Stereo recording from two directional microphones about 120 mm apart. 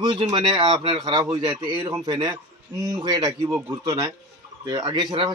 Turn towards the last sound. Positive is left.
turn(degrees=-35)  # may be behind; listen again after turning